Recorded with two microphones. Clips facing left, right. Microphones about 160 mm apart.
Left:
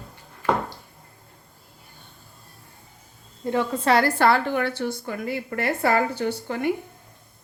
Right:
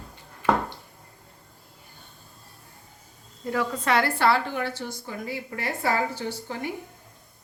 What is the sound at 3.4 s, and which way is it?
A woman's voice, 25° left (ahead or behind).